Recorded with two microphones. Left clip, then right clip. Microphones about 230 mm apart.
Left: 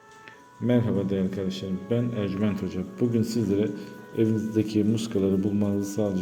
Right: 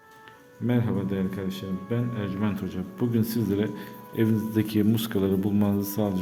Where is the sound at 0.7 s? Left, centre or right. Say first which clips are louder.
Left 3 dB; centre.